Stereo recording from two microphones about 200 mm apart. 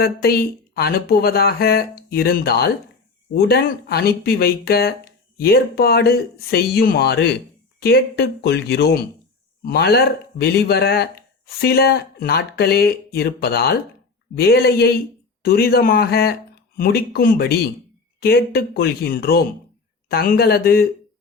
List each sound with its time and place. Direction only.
0.0 s speech: 50° left (ahead or behind)